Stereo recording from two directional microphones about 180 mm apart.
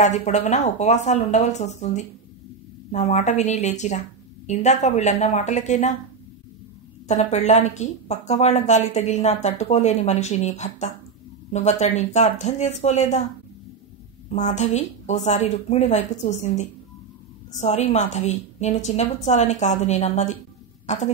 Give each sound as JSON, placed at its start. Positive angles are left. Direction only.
{"t": 0.0, "sound": "speech", "side_deg": 40}
{"t": 7.1, "sound": "speech", "side_deg": 40}
{"t": 14.3, "sound": "speech", "side_deg": 40}